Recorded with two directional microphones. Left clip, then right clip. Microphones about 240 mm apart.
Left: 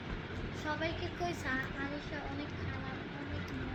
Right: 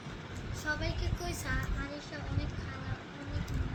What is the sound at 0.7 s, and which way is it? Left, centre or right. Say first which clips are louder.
Speech: right 1 dB; right.